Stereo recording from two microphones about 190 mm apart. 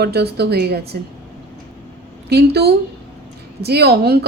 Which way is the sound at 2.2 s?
60° right (ahead or behind).